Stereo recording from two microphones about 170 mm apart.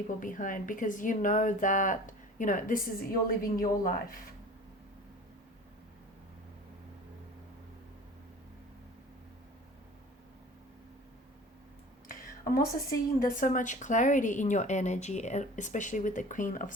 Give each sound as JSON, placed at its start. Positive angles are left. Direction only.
{"t": 0.2, "sound": "speech", "side_deg": 50}
{"t": 12.0, "sound": "a sound", "side_deg": 55}
{"t": 13.1, "sound": "speech", "side_deg": 50}